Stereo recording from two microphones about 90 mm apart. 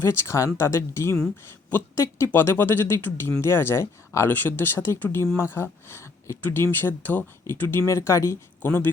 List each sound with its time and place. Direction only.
0.0 s speech: 30° left (ahead or behind)